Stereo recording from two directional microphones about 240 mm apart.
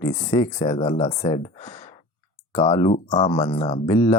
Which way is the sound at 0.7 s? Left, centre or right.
Left.